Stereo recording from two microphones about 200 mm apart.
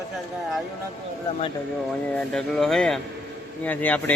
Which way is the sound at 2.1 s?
Centre (ahead or behind).